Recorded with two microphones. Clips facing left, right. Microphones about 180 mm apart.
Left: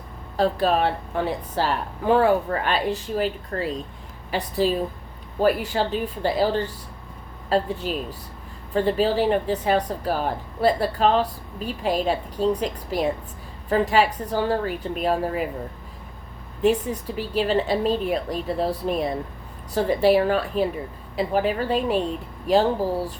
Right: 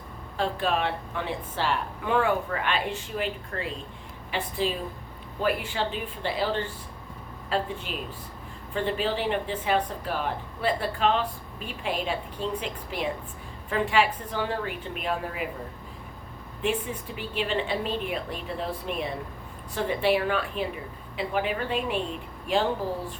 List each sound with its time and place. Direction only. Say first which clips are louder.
0.3 s speech: left 6 dB; 40° left (ahead or behind)
16.6 s speech: left 8 dB; 40° left (ahead or behind)